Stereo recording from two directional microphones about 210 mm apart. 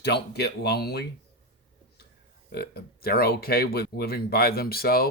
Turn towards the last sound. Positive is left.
turn(degrees=45)  # may be behind; listen again after turning